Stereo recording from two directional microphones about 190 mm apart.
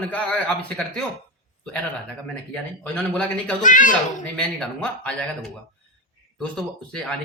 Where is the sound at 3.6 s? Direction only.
45° left (ahead or behind).